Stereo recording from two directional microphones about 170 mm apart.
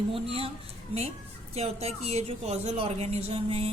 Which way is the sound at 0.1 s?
35° right (ahead or behind).